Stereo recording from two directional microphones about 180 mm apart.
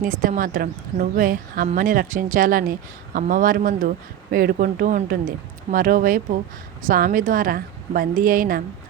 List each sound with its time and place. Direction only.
0.0 s a woman's voice: 50° right (ahead or behind)